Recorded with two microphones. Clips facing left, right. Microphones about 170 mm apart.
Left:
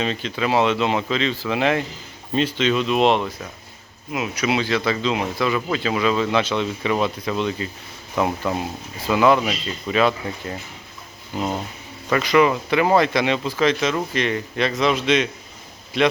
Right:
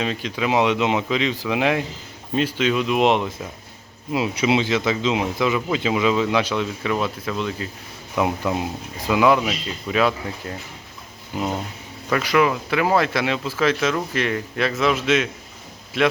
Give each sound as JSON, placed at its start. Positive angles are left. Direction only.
{"t": 0.0, "sound": "speech", "side_deg": -10}
{"t": 4.1, "sound": "speech", "side_deg": -25}
{"t": 11.3, "sound": "speech", "side_deg": 0}